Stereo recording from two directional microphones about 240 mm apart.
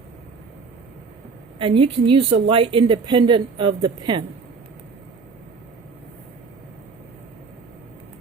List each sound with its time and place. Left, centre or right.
1.5 s speech: right